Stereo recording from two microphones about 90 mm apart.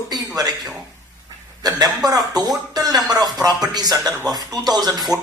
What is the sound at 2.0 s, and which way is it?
Speech, 45° right (ahead or behind).